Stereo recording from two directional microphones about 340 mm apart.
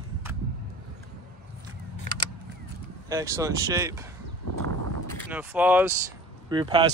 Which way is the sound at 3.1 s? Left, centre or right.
Centre.